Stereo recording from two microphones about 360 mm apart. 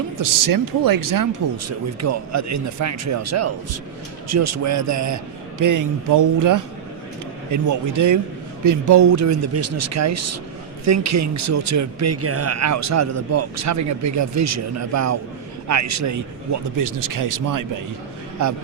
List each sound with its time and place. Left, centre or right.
0.2 s speech: right
1.6 s speech: right